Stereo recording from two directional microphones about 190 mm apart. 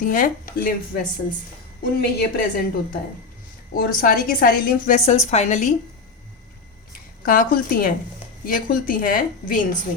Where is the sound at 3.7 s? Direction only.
50° left (ahead or behind).